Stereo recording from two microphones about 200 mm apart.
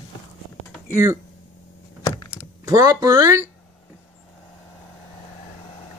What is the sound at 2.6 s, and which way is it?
Speech, 20° right (ahead or behind).